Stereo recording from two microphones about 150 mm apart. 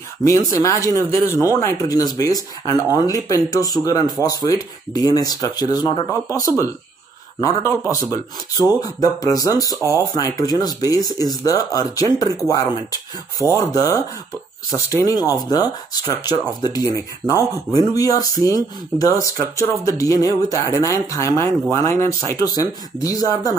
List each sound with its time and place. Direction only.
0.2 s speech: 20° left (ahead or behind)
9.8 s speech: 20° right (ahead or behind)
10.4 s speech: 25° left (ahead or behind)